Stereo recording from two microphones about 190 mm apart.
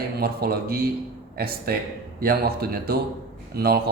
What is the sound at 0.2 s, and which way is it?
Speech, 55° right (ahead or behind).